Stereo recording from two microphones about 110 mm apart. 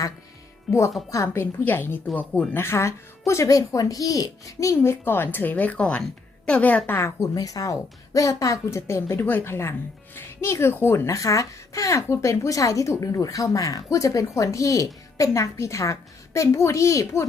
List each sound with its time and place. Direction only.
0.7 s speech: centre (ahead or behind)
1.1 s speech: 25° left (ahead or behind)